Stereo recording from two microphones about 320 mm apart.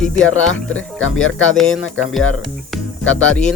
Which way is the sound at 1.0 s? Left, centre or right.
Left.